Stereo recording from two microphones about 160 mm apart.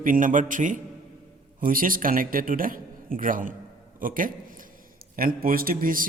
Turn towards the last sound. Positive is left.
turn(degrees=-60)  # may be behind; listen again after turning